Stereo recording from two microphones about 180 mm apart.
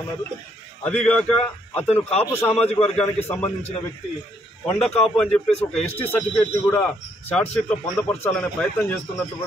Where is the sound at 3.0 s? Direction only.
35° left (ahead or behind).